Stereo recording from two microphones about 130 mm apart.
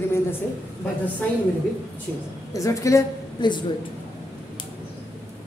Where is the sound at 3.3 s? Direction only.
35° left (ahead or behind).